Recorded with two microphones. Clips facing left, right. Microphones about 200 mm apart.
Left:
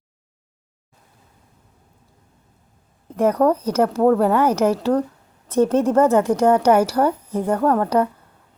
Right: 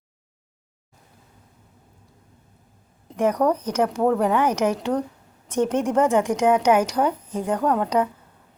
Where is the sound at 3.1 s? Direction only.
10° right (ahead or behind).